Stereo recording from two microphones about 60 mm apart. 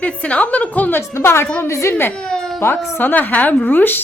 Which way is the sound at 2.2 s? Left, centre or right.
Centre.